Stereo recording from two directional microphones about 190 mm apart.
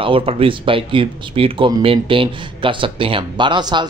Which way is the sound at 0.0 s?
30° right (ahead or behind).